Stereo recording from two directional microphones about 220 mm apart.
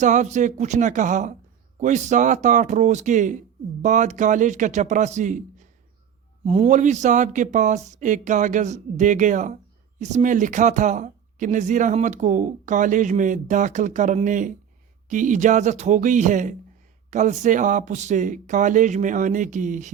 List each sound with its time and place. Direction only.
0.0 s speech: 35° right (ahead or behind)